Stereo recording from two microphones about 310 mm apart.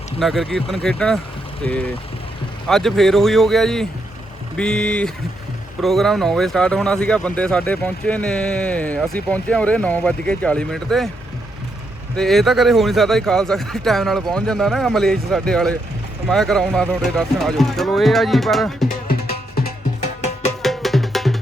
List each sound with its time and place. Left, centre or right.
0.2 s speech: centre
12.1 s speech: centre
19.0 s music: left
20.6 s music: centre